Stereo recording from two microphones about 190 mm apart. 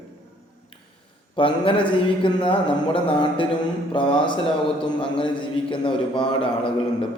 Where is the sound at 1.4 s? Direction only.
25° left (ahead or behind).